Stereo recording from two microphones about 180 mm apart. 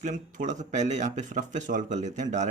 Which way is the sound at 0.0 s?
45° right (ahead or behind).